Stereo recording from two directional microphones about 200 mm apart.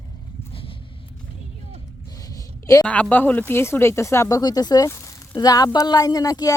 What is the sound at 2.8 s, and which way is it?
Speech, 5° left (ahead or behind).